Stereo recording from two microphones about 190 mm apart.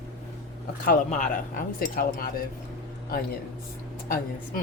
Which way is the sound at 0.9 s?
45° left (ahead or behind).